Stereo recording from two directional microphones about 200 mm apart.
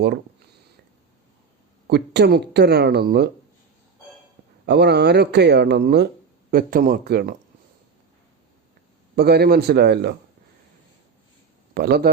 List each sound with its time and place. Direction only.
1.9 s speech: 55° right (ahead or behind)
4.6 s speech: 55° right (ahead or behind)
9.1 s speech: 50° right (ahead or behind)
11.7 s speech: 50° right (ahead or behind)